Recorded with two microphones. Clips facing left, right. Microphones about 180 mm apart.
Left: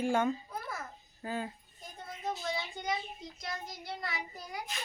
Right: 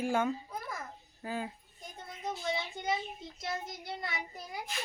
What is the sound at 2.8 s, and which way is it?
Speech, 25° right (ahead or behind).